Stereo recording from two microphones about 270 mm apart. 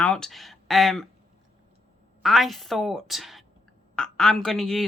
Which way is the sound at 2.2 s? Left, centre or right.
Centre.